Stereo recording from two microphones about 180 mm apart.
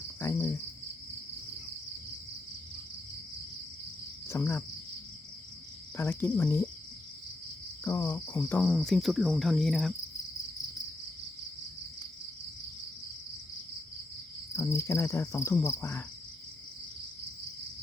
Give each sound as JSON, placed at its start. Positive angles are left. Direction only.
{"t": 0.2, "sound": "cricket", "side_deg": 15}
{"t": 4.3, "sound": "cricket", "side_deg": 15}
{"t": 6.0, "sound": "insect", "side_deg": 10}
{"t": 7.9, "sound": "speech", "side_deg": 20}
{"t": 14.5, "sound": "insect", "side_deg": 15}